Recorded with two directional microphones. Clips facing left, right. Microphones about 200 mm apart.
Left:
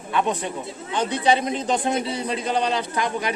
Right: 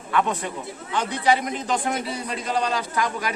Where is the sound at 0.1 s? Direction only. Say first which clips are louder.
Left 1 dB; 20° left (ahead or behind).